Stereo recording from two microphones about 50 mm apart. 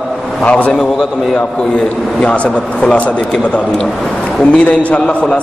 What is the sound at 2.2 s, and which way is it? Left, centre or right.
Speech, centre.